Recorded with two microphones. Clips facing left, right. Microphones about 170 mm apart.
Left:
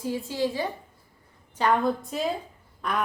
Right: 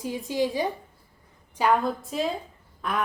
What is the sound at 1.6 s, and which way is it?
Speech, 5° right (ahead or behind).